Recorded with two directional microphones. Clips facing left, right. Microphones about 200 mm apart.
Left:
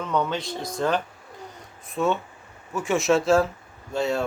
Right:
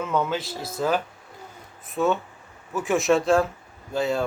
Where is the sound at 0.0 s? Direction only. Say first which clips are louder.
Even; 5° right (ahead or behind).